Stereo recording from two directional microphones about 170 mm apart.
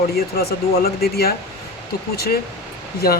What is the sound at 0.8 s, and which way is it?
Speech, 65° left (ahead or behind).